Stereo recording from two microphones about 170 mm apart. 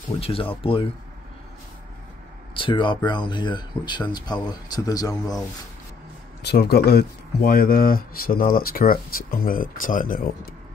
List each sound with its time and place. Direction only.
0.2 s speech: 35° left (ahead or behind)
2.5 s speech: 30° left (ahead or behind)
6.4 s speech: 75° left (ahead or behind); by 10.3 s 55° left (ahead or behind)